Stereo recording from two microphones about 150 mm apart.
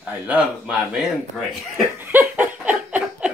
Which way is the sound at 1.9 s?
15° right (ahead or behind).